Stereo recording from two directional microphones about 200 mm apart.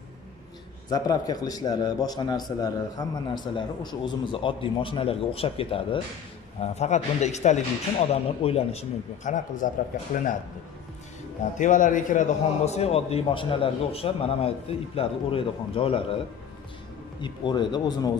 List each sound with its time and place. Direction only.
0.8 s a man's voice: 20° left (ahead or behind); by 9.7 s 40° left (ahead or behind)
11.5 s a man's voice: 40° left (ahead or behind)
17.2 s a man's voice: 25° left (ahead or behind)